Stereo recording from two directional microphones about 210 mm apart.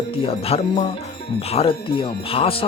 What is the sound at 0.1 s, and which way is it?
Speech, 25° left (ahead or behind).